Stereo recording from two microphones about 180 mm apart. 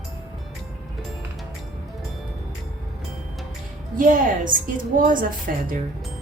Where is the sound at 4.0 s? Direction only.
50° right (ahead or behind).